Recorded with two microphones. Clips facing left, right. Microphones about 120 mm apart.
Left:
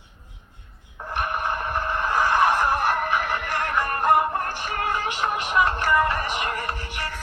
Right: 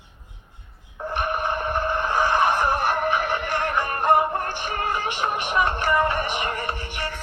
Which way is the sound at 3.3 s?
Centre (ahead or behind).